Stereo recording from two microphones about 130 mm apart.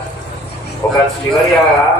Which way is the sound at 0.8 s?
20° left (ahead or behind).